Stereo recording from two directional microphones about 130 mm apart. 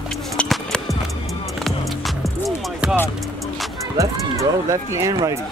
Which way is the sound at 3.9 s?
25° right (ahead or behind).